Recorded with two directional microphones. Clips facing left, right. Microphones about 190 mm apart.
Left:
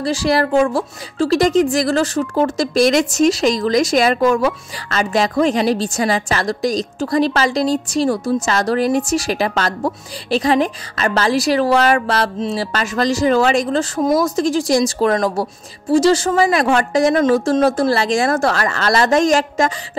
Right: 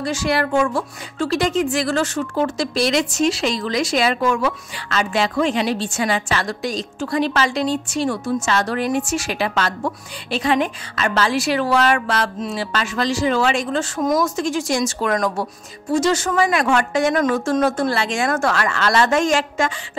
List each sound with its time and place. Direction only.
0.0 s a woman's voice: 35° left (ahead or behind)